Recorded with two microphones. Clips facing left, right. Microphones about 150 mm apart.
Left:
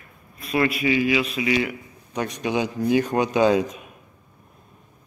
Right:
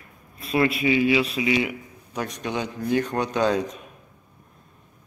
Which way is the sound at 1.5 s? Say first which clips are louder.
Left 2 dB; 15° right (ahead or behind).